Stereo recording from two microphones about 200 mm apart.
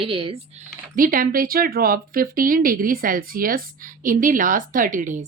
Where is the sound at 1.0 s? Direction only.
45° right (ahead or behind).